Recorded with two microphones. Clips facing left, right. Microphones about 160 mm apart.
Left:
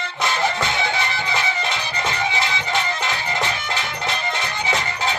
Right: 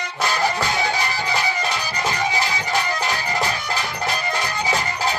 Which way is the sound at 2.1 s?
40° right (ahead or behind).